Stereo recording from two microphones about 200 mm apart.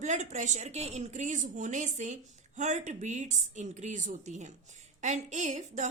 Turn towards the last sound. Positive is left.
turn(degrees=-35)  # may be behind; listen again after turning